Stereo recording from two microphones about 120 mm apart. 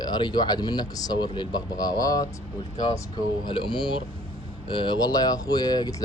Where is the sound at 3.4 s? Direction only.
40° left (ahead or behind).